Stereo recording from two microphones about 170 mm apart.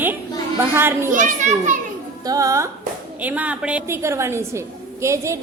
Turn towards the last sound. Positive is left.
turn(degrees=-15)  # may be behind; listen again after turning